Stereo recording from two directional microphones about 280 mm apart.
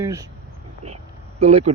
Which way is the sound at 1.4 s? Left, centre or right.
Right.